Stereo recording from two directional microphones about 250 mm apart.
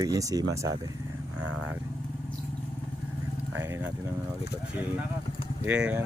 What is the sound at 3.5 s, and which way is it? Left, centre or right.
Speech, centre.